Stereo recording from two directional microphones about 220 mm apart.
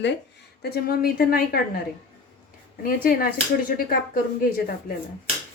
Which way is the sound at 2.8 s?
40° left (ahead or behind).